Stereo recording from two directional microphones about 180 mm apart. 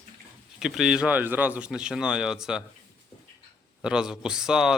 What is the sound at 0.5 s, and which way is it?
Speech, centre (ahead or behind).